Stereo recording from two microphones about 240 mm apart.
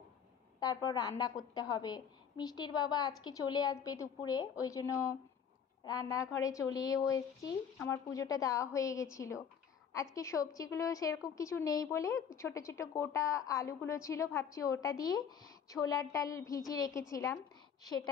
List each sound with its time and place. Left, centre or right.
0.6 s a woman's voice: centre